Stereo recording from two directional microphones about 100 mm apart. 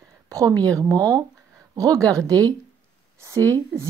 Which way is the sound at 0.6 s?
35° right (ahead or behind).